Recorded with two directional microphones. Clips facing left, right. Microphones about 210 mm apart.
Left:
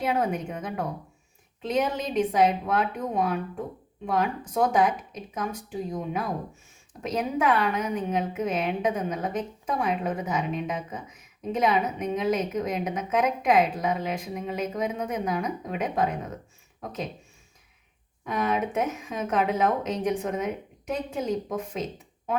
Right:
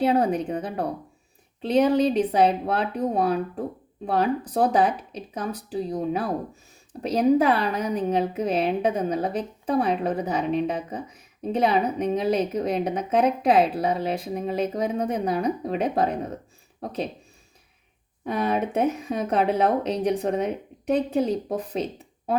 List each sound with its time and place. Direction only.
0.0 s a woman's voice: 35° right (ahead or behind)
18.3 s a woman's voice: 35° right (ahead or behind)